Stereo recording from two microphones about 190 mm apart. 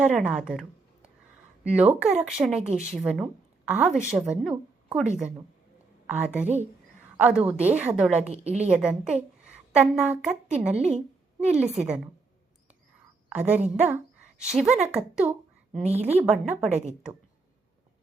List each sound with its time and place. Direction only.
0.0 s speech: 5° right (ahead or behind)
1.7 s a woman's voice: 5° right (ahead or behind)
11.6 s a woman's voice: 35° right (ahead or behind)
13.3 s a woman's voice: 5° right (ahead or behind)
15.7 s a woman's voice: 35° right (ahead or behind)
16.2 s speech: centre (ahead or behind)